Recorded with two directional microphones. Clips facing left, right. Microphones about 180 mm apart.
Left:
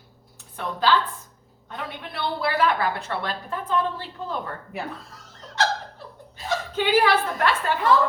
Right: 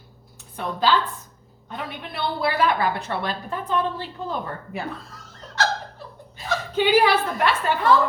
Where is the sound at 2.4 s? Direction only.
15° right (ahead or behind).